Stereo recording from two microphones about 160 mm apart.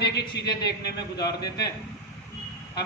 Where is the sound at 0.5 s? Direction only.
25° left (ahead or behind).